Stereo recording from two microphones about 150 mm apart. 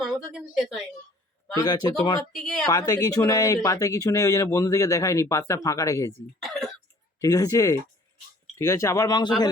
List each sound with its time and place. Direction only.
0.0 s a woman's voice: centre (ahead or behind)
1.5 s speech: 25° left (ahead or behind)
2.3 s a woman's voice: 5° left (ahead or behind)
2.6 s speech: 25° left (ahead or behind)
6.4 s cough: centre (ahead or behind)
7.2 s speech: 20° left (ahead or behind)